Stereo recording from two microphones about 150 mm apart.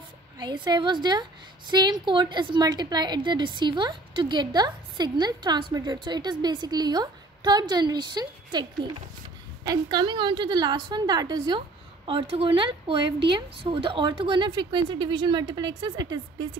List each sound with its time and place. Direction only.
0.4 s a woman's voice: 30° right (ahead or behind)